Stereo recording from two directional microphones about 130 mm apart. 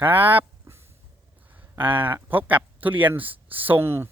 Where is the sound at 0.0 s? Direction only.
15° right (ahead or behind).